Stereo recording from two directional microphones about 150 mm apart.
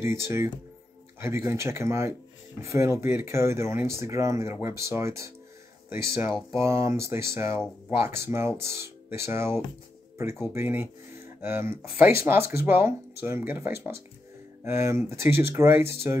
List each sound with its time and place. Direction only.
0.0 s speech: 15° right (ahead or behind)